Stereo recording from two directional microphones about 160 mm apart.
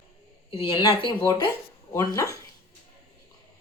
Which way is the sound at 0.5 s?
35° left (ahead or behind).